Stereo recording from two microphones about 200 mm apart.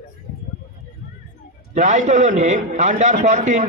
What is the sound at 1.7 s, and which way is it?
A man's voice, 40° right (ahead or behind).